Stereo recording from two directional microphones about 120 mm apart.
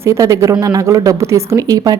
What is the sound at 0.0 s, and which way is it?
A woman's voice, 25° right (ahead or behind).